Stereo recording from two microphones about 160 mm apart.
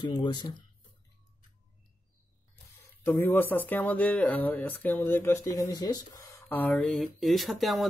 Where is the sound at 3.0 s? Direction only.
10° left (ahead or behind).